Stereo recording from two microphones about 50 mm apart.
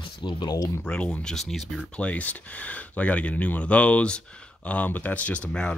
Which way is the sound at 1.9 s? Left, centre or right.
Left.